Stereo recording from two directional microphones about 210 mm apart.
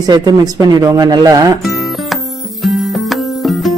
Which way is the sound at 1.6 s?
Centre (ahead or behind).